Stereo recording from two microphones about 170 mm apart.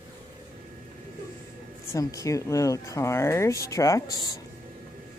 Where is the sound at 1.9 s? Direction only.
20° left (ahead or behind).